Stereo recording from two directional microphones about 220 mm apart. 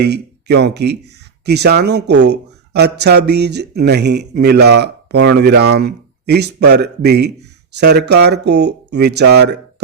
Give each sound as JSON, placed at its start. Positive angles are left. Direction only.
{"t": 0.0, "sound": "speech", "side_deg": -50}